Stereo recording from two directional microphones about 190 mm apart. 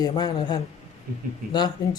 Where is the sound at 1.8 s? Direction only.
20° left (ahead or behind).